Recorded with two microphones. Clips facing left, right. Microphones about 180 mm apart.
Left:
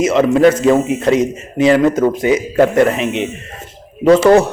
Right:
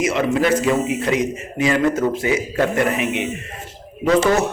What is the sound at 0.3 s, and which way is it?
Speech, 30° left (ahead or behind).